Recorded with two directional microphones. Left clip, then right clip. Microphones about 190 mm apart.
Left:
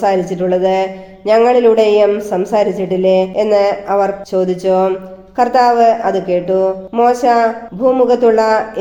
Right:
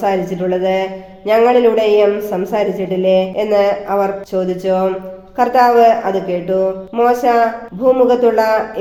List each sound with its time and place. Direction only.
0.0 s speech: 45° left (ahead or behind)